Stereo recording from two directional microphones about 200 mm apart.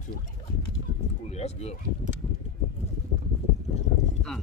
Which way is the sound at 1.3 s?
30° left (ahead or behind).